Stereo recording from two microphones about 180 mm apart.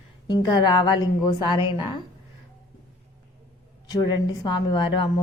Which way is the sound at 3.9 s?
20° left (ahead or behind).